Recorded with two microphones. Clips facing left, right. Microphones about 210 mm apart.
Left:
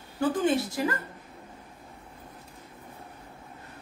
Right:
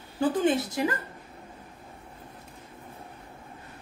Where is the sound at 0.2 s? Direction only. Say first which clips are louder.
Right 1 dB; 20° right (ahead or behind).